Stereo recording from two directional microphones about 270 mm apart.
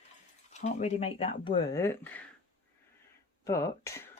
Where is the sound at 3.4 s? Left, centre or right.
Centre.